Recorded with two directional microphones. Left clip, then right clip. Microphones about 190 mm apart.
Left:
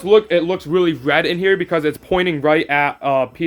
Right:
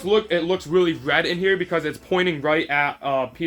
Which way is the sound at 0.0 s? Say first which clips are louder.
Left 7 dB; 55° left (ahead or behind).